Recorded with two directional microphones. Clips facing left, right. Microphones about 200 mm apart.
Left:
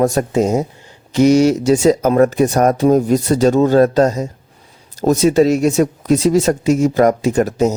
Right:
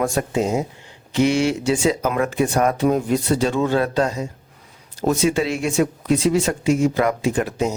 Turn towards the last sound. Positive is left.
turn(degrees=40)  # may be behind; listen again after turning